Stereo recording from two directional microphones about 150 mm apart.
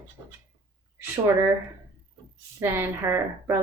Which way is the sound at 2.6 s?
15° right (ahead or behind).